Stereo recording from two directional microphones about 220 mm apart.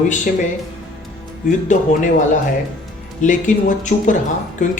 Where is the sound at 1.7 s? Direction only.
35° left (ahead or behind).